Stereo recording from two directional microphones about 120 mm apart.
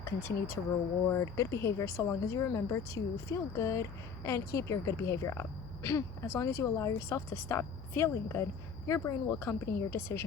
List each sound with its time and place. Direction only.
0.0 s speech: 20° left (ahead or behind)